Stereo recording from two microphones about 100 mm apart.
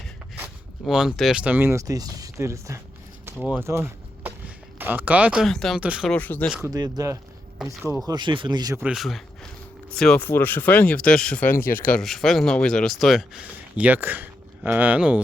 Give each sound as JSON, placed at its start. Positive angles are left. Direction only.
{"t": 0.9, "sound": "speech", "side_deg": -5}
{"t": 1.8, "sound": "speech", "side_deg": -35}
{"t": 3.6, "sound": "a sound", "side_deg": -25}
{"t": 4.4, "sound": "speech", "side_deg": -15}
{"t": 5.8, "sound": "speech", "side_deg": -10}
{"t": 6.1, "sound": "speech", "side_deg": 15}
{"t": 6.7, "sound": "speech", "side_deg": -40}
{"t": 7.6, "sound": "speech", "side_deg": 0}
{"t": 8.0, "sound": "speech", "side_deg": -50}
{"t": 8.8, "sound": "speech", "side_deg": -5}
{"t": 10.2, "sound": "speech", "side_deg": 20}
{"t": 11.9, "sound": "speech", "side_deg": 5}